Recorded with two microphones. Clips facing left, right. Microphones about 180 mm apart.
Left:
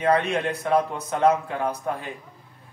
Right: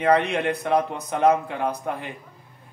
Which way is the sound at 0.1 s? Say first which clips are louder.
Right 3 dB; 15° right (ahead or behind).